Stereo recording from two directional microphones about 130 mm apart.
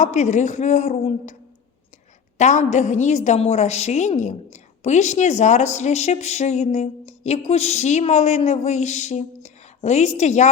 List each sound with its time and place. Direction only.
0.0 s a woman's voice: 60° left (ahead or behind)
2.4 s a woman's voice: 60° left (ahead or behind)